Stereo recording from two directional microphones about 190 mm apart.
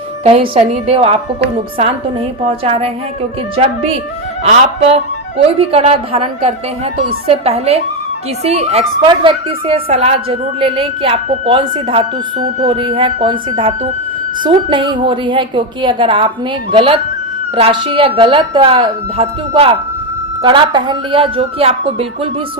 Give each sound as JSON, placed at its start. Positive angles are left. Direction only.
{"t": 0.3, "sound": "a woman's voice", "side_deg": -30}
{"t": 4.4, "sound": "a woman's voice", "side_deg": -35}